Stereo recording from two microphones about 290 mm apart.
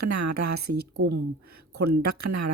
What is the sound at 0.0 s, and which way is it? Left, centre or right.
Speech, right.